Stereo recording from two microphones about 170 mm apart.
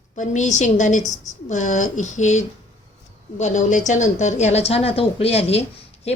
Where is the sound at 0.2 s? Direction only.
45° left (ahead or behind).